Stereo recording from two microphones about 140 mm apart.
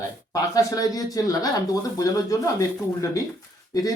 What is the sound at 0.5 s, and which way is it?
Speech, 25° left (ahead or behind).